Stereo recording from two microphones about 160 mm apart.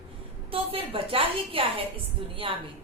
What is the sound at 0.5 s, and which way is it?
A woman's voice, 35° right (ahead or behind).